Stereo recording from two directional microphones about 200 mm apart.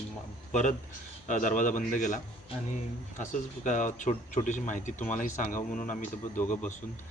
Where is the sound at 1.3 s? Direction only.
40° left (ahead or behind).